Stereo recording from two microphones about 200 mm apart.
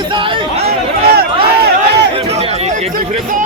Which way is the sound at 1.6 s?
55° right (ahead or behind).